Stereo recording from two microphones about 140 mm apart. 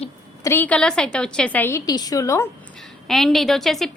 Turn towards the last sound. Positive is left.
turn(degrees=0)  # may be behind; listen again after turning